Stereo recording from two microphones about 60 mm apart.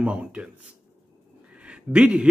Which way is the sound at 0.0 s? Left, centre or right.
Right.